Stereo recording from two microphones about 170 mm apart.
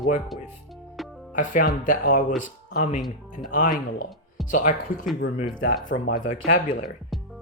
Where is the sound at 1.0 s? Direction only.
Centre (ahead or behind).